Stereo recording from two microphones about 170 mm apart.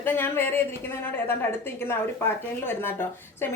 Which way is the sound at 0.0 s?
10° left (ahead or behind).